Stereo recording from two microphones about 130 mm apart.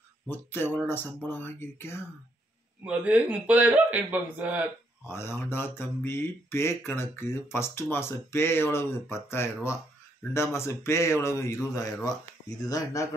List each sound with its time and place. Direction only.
0.3 s speech: 15° left (ahead or behind)
2.8 s a man's voice: 10° right (ahead or behind)
5.0 s speech: 20° left (ahead or behind)